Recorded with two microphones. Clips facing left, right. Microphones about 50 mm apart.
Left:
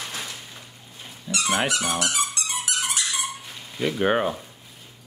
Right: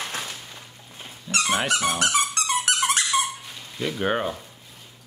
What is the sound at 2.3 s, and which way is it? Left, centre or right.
Dog, right.